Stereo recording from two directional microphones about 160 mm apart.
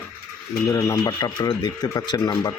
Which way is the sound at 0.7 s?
20° left (ahead or behind).